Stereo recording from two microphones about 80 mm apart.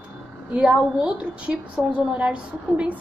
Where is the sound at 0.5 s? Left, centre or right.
Centre.